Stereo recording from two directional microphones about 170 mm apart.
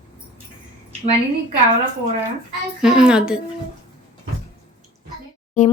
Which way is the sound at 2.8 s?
5° right (ahead or behind).